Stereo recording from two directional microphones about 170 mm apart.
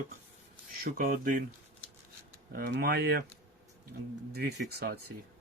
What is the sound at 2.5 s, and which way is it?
Speech, 75° right (ahead or behind).